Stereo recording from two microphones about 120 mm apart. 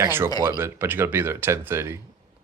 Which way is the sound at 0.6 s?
20° right (ahead or behind).